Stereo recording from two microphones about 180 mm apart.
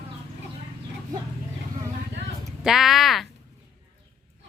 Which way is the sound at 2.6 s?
Centre (ahead or behind).